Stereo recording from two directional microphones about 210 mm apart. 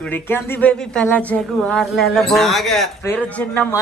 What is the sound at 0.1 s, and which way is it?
A man's voice, 10° left (ahead or behind).